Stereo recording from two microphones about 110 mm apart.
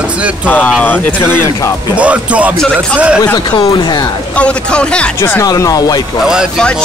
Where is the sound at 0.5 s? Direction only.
10° left (ahead or behind).